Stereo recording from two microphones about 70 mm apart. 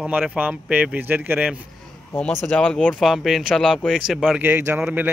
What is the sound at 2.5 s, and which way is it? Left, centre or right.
Speech, centre.